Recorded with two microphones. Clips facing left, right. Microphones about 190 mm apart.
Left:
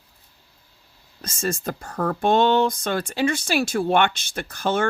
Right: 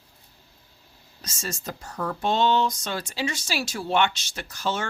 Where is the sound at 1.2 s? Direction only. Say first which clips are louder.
Left 8 dB; 55° left (ahead or behind).